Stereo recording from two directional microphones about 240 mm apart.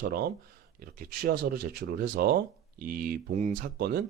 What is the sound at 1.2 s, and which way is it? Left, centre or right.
Speech, right.